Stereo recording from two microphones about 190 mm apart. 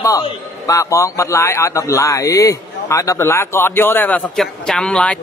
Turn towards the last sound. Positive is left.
turn(degrees=5)  # may be behind; listen again after turning